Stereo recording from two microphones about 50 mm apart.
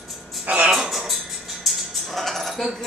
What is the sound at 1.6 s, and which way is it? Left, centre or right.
Music, centre.